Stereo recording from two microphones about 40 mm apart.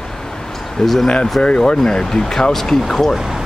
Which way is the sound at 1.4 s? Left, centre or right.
Centre.